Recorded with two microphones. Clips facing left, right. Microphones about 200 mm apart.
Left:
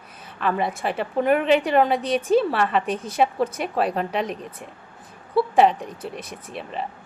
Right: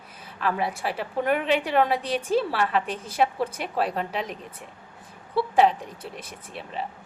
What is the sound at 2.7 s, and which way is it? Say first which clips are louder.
A woman's voice: left 3 dB; 60° left (ahead or behind).